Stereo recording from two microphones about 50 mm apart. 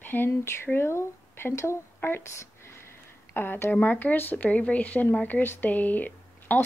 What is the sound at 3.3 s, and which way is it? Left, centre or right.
Speech, left.